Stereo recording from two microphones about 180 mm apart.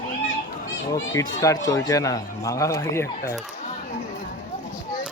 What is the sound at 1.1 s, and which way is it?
Speech, 15° left (ahead or behind).